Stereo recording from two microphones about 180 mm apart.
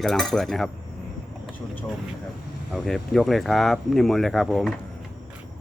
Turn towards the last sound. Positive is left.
turn(degrees=0)  # may be behind; listen again after turning